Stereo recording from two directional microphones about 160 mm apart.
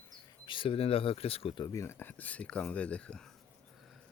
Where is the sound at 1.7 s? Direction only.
15° left (ahead or behind).